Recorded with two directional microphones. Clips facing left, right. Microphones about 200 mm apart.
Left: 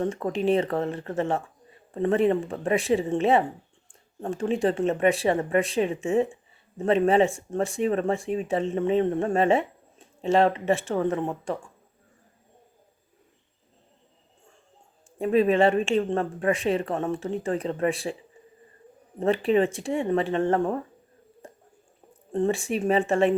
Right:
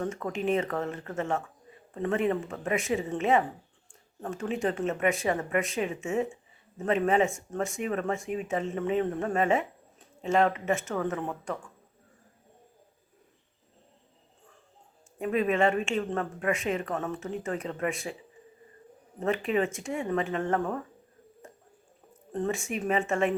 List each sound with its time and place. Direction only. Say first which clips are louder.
0.0 s speech: left 5 dB; 30° left (ahead or behind)
15.2 s speech: left 5 dB; 30° left (ahead or behind)
19.2 s speech: left 6 dB; 35° left (ahead or behind)
21.4 s a sound: left 4 dB; 35° left (ahead or behind)
22.3 s speech: left 6 dB; 30° left (ahead or behind)